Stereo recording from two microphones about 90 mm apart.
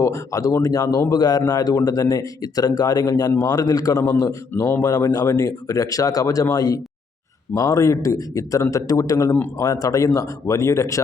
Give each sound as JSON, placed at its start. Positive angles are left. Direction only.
{"t": 0.0, "sound": "a man's voice", "side_deg": 35}
{"t": 4.5, "sound": "speech", "side_deg": 25}
{"t": 4.8, "sound": "speech", "side_deg": 40}